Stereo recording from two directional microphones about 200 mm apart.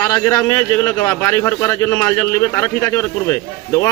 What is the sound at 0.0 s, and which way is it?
A man's voice, 15° left (ahead or behind).